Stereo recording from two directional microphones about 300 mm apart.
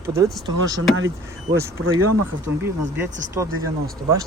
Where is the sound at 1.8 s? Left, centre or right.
Right.